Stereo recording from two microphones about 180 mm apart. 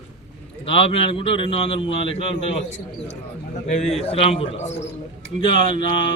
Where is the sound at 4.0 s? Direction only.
35° left (ahead or behind).